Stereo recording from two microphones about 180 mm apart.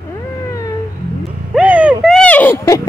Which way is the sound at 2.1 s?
10° left (ahead or behind).